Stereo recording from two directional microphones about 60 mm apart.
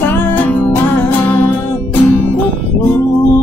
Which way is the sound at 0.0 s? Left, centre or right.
Left.